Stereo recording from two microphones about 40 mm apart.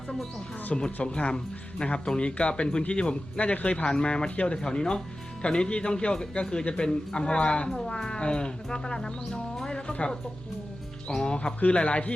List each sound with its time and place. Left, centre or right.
0.7 s speech: left
3.8 s speech: left
11.2 s speech: left